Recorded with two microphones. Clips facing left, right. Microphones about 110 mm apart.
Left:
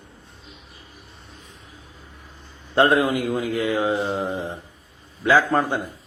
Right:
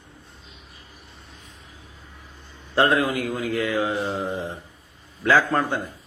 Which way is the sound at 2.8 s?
20° left (ahead or behind).